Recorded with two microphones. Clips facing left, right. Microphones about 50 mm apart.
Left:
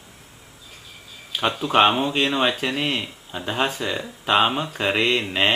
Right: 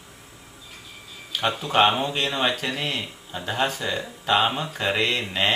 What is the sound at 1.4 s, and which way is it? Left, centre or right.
Speech, centre.